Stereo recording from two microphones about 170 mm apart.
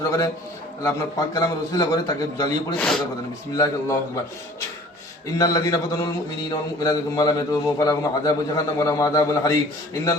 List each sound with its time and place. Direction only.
0.0 s a man's voice: 20° left (ahead or behind)
2.7 s speech: 5° left (ahead or behind)
3.5 s a man's voice: 20° left (ahead or behind)
5.4 s a man's voice: 20° left (ahead or behind)